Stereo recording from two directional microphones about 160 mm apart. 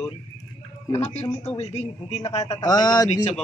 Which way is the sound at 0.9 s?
40° left (ahead or behind).